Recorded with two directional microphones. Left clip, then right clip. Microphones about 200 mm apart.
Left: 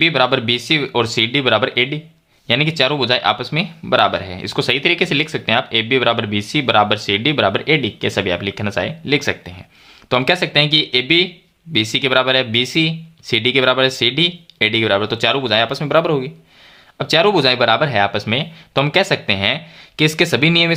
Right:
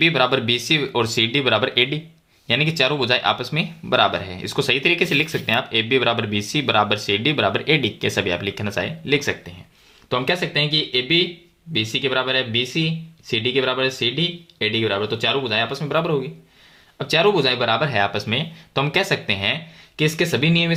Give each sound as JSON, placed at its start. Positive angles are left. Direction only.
{"t": 0.0, "sound": "speech", "side_deg": 15}
{"t": 10.1, "sound": "speech", "side_deg": 35}